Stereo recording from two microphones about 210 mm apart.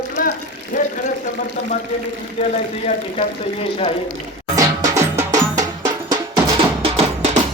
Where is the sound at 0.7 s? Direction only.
40° left (ahead or behind).